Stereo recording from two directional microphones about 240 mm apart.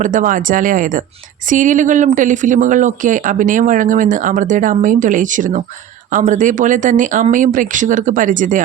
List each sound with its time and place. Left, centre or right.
0.0 s speech: right